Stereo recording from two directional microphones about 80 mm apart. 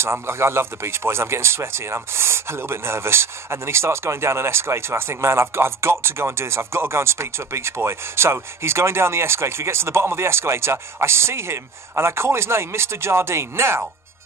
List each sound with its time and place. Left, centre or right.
0.0 s speech: right